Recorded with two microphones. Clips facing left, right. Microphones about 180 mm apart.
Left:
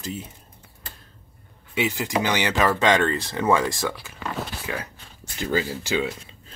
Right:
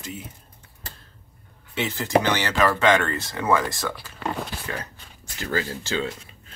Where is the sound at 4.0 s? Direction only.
10° left (ahead or behind).